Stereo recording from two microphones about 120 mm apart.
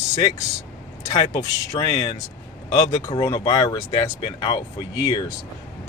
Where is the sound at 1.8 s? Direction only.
45° left (ahead or behind).